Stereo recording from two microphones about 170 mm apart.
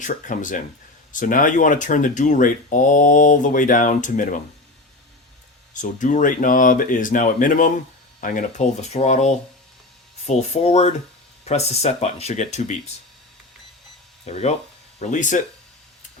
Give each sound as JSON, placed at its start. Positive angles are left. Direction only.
{"t": 0.0, "sound": "speech", "side_deg": 50}
{"t": 5.7, "sound": "speech", "side_deg": 45}
{"t": 14.3, "sound": "speech", "side_deg": 40}